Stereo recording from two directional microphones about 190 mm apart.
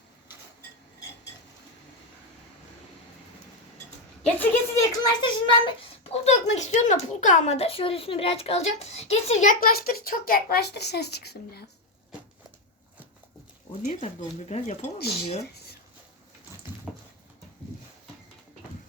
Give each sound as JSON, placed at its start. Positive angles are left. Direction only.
{"t": 4.4, "sound": "a child's voice", "side_deg": 15}
{"t": 13.8, "sound": "a child's voice", "side_deg": 35}
{"t": 14.9, "sound": "speech", "side_deg": 55}
{"t": 16.9, "sound": "a sound", "side_deg": 0}